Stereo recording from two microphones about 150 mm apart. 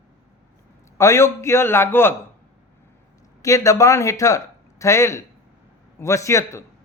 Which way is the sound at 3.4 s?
20° left (ahead or behind).